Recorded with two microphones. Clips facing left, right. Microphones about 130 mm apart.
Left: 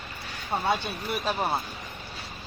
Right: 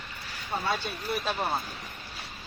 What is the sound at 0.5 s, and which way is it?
Speech, 25° left (ahead or behind).